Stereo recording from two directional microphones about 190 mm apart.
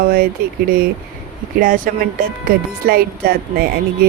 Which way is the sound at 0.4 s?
50° right (ahead or behind).